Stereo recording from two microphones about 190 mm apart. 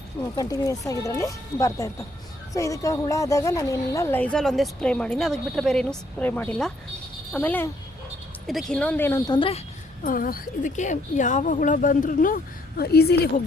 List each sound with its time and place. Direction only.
0.2 s a woman's voice: 20° left (ahead or behind)
9.3 s speech: 30° left (ahead or behind)
10.0 s speech: 45° left (ahead or behind)